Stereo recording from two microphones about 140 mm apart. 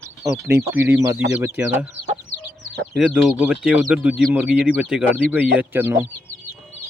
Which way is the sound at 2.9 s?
5° right (ahead or behind).